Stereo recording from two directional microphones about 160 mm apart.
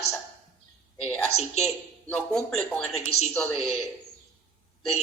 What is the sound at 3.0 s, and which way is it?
Speech, 40° left (ahead or behind).